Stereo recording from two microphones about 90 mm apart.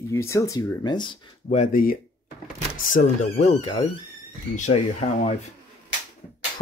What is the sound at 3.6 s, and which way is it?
Speech, 90° left.